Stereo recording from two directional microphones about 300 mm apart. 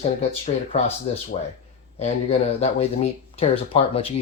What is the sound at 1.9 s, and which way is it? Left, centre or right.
Speech, left.